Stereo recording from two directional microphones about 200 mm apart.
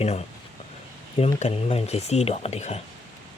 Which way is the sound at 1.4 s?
30° left (ahead or behind).